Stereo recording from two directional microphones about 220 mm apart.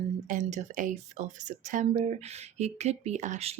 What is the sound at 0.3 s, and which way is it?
Speech, 35° right (ahead or behind).